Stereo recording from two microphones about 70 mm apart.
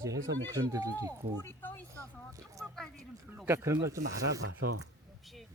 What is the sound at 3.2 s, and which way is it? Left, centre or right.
Speech, right.